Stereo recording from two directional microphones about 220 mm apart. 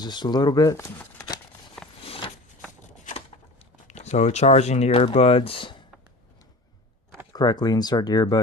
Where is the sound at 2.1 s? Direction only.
25° left (ahead or behind).